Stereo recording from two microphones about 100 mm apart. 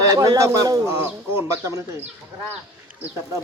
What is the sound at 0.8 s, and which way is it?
Speech, 25° right (ahead or behind).